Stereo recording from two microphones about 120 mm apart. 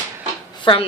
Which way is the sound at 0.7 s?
45° left (ahead or behind).